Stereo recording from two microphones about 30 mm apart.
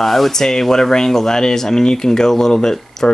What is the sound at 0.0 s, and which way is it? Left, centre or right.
Speech, centre.